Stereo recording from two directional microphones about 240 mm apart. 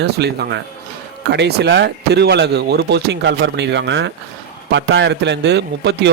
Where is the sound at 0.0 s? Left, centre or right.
Right.